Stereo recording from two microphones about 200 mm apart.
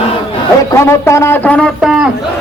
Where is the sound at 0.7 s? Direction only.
15° left (ahead or behind).